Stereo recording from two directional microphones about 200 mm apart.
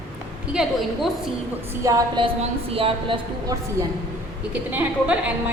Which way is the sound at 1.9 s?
20° right (ahead or behind).